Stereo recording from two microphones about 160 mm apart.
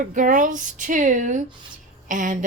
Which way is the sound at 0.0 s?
55° right (ahead or behind).